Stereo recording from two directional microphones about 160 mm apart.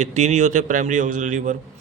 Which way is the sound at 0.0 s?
45° right (ahead or behind).